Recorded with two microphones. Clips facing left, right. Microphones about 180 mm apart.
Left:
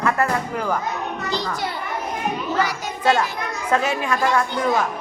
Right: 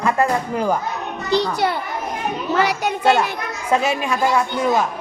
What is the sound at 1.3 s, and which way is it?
Speech, 65° right (ahead or behind).